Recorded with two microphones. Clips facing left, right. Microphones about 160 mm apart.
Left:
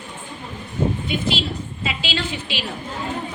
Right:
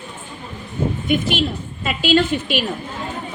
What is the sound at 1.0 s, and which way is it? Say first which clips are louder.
A woman's voice: right 5 dB; 50° right (ahead or behind).